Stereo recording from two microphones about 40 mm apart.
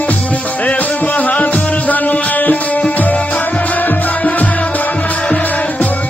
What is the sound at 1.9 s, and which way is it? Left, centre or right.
Music, left.